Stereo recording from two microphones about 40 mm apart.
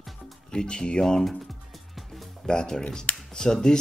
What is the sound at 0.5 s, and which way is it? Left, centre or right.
Speech, left.